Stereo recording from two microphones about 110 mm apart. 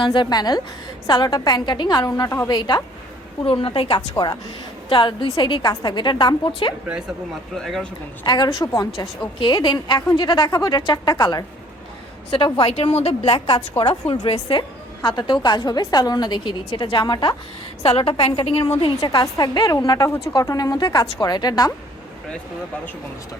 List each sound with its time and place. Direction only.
0.0 s a woman's voice: 45° left (ahead or behind); by 2.5 s 25° left (ahead or behind)
2.5 s a woman's voice: 40° left (ahead or behind)
3.4 s a woman's voice: 55° left (ahead or behind)
4.1 s a woman's voice: 35° left (ahead or behind)
4.9 s a woman's voice: 45° left (ahead or behind)
7.5 s speech: 5° left (ahead or behind)
8.2 s a woman's voice: 45° left (ahead or behind)
8.4 s a woman's voice: 30° left (ahead or behind)
9.4 s a woman's voice: 45° left (ahead or behind)
12.5 s a woman's voice: 55° left (ahead or behind)
15.0 s a woman's voice: 45° left (ahead or behind)
17.8 s a woman's voice: 55° left (ahead or behind)
18.9 s a woman's voice: 35° left (ahead or behind)